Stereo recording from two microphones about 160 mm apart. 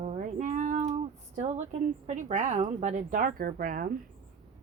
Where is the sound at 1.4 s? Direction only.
45° right (ahead or behind).